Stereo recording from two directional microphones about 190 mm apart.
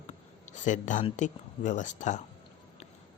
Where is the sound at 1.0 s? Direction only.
40° left (ahead or behind).